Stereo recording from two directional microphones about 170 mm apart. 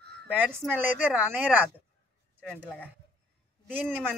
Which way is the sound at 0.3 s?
10° right (ahead or behind).